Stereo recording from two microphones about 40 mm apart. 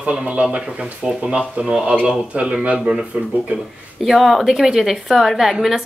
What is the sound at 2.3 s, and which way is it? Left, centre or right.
Speech, right.